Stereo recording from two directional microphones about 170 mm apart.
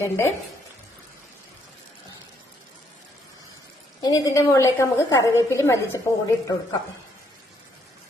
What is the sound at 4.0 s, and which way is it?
A woman's voice, 20° left (ahead or behind).